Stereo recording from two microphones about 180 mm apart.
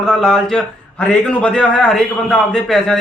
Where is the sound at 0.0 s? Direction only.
5° left (ahead or behind).